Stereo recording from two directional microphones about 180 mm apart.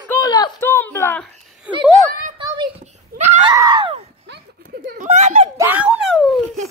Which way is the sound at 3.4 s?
20° right (ahead or behind).